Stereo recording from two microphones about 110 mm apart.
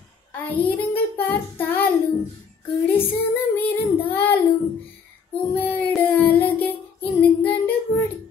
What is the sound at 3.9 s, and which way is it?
Child singing, 15° left (ahead or behind).